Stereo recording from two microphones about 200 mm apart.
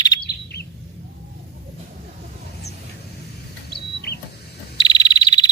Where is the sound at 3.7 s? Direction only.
55° left (ahead or behind).